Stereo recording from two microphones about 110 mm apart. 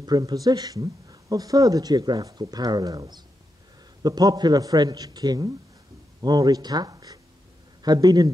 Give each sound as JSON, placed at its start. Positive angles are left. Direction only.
{"t": 0.0, "sound": "speech", "side_deg": -35}